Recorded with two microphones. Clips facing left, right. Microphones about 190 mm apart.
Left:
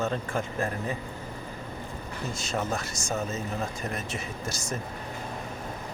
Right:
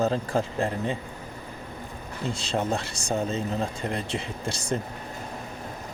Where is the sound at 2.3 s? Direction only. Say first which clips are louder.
Right 3 dB; 30° right (ahead or behind).